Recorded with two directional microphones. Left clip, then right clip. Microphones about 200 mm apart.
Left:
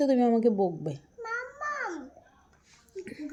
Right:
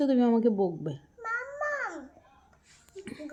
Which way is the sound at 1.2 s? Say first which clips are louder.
Right 2 dB; 15° right (ahead or behind).